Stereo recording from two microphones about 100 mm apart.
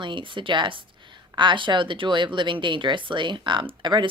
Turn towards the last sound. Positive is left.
turn(degrees=-50)  # may be behind; listen again after turning